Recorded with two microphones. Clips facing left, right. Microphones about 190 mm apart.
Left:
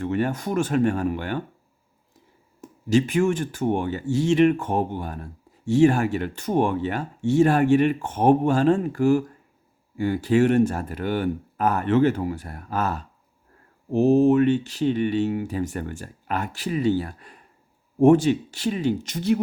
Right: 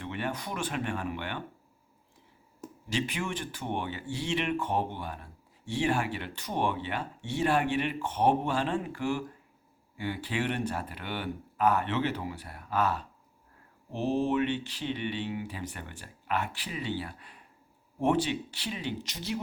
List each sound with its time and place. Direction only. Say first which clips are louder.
0.0 s speech: left 10 dB; 45° left (ahead or behind)
2.9 s speech: left 13 dB; 45° left (ahead or behind)